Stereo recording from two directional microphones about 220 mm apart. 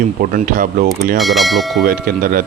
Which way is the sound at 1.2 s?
Centre (ahead or behind).